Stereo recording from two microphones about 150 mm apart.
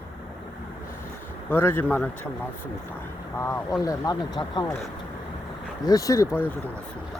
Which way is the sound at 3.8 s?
25° left (ahead or behind).